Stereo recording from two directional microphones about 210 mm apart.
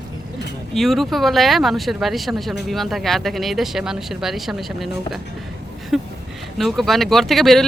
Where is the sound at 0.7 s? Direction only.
Centre (ahead or behind).